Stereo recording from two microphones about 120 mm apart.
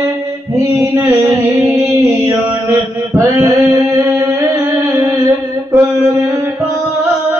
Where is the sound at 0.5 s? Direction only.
25° right (ahead or behind).